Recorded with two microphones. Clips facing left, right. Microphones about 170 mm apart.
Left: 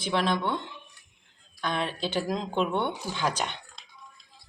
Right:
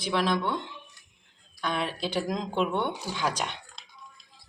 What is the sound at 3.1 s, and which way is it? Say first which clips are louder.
Speech: left 1 dB; 10° right (ahead or behind).